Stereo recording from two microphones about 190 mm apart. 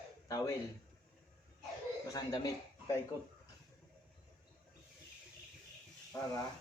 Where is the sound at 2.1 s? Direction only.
20° left (ahead or behind).